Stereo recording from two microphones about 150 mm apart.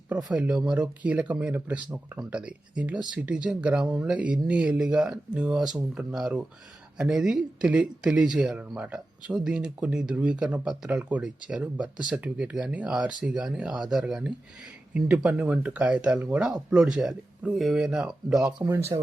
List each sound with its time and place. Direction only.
0.1 s speech: 10° right (ahead or behind)
18.6 s speech: 15° right (ahead or behind)